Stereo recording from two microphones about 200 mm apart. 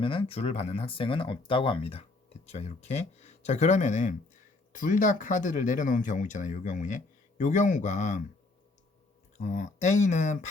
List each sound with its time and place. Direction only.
0.0 s speech: 25° left (ahead or behind)
9.4 s speech: 35° left (ahead or behind)